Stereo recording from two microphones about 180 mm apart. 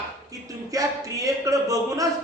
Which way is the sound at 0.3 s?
20° right (ahead or behind).